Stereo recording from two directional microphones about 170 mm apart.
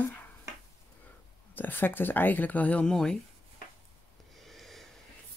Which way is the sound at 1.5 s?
10° left (ahead or behind).